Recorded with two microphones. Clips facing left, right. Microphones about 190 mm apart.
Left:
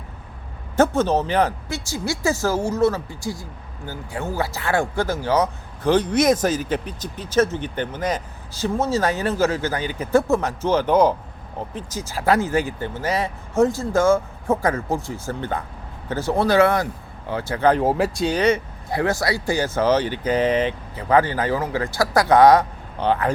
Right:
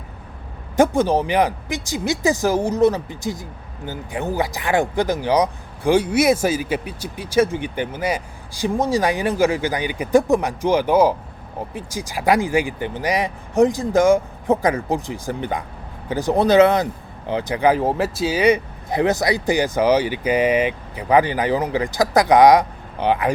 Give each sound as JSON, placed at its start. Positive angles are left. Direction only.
{"t": 0.8, "sound": "speech", "side_deg": -10}
{"t": 17.7, "sound": "speech", "side_deg": 0}